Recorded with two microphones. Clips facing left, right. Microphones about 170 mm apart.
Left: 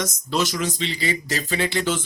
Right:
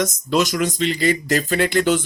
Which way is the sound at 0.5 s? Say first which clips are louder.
Right 6 dB; 50° right (ahead or behind).